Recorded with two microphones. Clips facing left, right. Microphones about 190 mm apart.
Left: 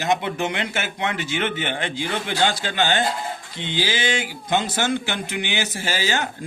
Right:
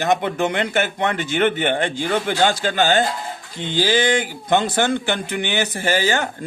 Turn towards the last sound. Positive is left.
turn(degrees=-55)  # may be behind; listen again after turning